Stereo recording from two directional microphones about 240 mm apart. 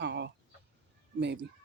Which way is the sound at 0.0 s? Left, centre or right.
Right.